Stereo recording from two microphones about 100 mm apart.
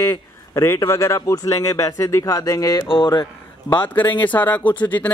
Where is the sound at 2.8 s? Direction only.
55° left (ahead or behind).